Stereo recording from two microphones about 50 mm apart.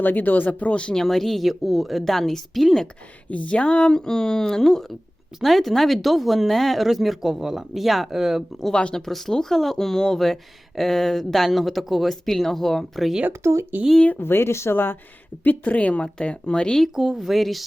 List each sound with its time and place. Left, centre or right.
0.0 s speech: left
0.9 s speech: centre
3.2 s speech: left; by 8.4 s centre
8.7 s speech: centre
9.0 s speech: centre
13.4 s speech: right
14.2 s speech: left
15.4 s speech: left
16.9 s speech: centre